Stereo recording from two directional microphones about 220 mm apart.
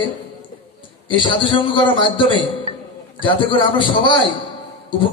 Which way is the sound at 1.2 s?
20° left (ahead or behind).